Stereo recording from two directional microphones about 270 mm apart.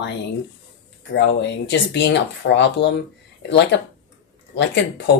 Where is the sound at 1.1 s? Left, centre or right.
Left.